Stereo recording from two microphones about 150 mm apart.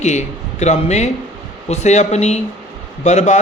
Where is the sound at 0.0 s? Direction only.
50° left (ahead or behind).